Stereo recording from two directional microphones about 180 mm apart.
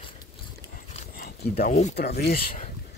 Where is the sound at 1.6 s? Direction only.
40° left (ahead or behind).